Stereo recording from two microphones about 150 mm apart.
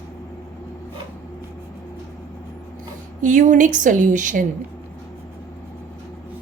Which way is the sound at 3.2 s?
55° right (ahead or behind).